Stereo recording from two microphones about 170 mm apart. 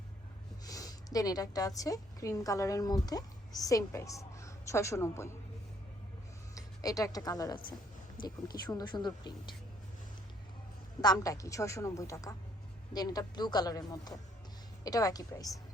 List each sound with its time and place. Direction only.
0.6 s a woman's voice: 20° left (ahead or behind)
6.5 s a woman's voice: 20° left (ahead or behind)
11.0 s a woman's voice: 20° left (ahead or behind)